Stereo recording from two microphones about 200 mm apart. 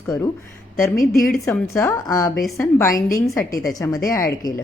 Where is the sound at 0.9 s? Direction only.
45° left (ahead or behind).